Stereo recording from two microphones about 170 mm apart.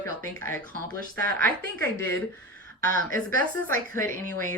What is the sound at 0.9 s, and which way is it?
Speech, 55° right (ahead or behind).